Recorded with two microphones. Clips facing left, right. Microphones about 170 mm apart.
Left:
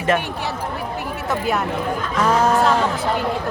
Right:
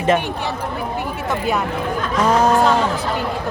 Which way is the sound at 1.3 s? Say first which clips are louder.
Even; centre (ahead or behind).